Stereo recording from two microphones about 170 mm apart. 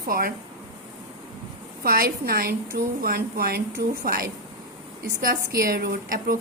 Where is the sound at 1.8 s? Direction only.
60° right (ahead or behind).